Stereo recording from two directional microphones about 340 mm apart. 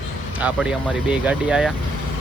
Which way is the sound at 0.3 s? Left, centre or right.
Centre.